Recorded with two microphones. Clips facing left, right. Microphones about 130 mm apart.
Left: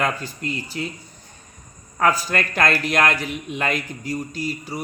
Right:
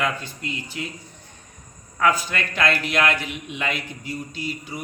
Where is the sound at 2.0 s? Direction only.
40° left (ahead or behind).